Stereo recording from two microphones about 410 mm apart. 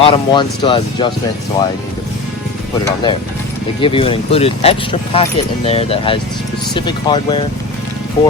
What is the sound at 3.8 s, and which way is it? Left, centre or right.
Speech, centre.